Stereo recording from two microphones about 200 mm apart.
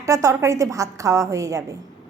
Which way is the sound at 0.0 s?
15° right (ahead or behind).